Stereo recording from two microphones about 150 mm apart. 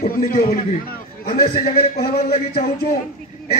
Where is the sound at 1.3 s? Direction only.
90° left.